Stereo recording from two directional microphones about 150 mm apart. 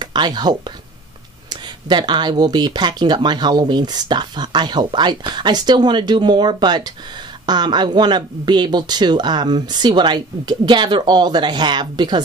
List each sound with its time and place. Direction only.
0.0 s speech: 30° right (ahead or behind)